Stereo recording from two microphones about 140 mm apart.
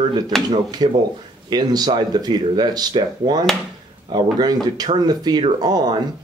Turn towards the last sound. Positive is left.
turn(degrees=-30)  # may be behind; listen again after turning